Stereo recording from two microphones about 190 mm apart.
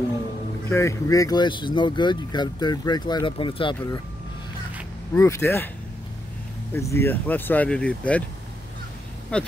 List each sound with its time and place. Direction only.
0.7 s speech: 15° left (ahead or behind)
5.1 s speech: 15° left (ahead or behind)
6.7 s speech: 15° left (ahead or behind)
9.3 s speech: 5° left (ahead or behind)